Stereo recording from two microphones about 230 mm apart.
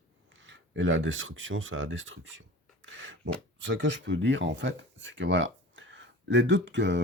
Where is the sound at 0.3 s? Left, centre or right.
Right.